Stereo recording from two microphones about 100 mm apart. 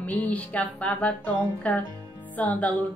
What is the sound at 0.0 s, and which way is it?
A woman's voice, 15° left (ahead or behind).